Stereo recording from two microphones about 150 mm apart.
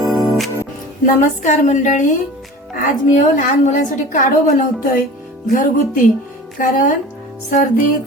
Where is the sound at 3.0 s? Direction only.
55° left (ahead or behind).